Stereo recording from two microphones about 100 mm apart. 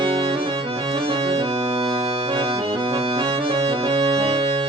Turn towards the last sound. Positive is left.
turn(degrees=-65)  # may be behind; listen again after turning